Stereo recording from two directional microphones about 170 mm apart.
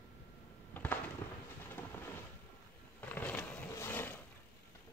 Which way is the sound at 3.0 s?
10° left (ahead or behind).